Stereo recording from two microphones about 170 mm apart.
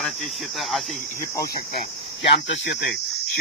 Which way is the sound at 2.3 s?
85° left.